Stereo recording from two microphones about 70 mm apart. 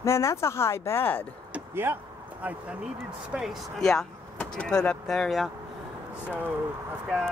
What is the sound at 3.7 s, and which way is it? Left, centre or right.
Speech, centre.